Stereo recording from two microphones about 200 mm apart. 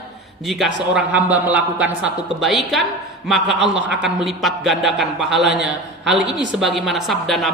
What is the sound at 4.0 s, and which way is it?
A man's voice, centre (ahead or behind).